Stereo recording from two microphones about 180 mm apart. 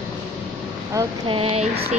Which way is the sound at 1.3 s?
30° right (ahead or behind).